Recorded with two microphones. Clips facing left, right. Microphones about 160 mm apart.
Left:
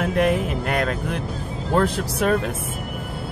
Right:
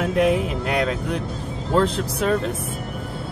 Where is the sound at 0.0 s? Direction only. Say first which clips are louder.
Right 1 dB; centre (ahead or behind).